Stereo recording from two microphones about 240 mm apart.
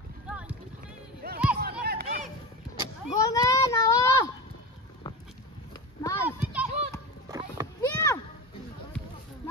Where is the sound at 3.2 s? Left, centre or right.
Centre.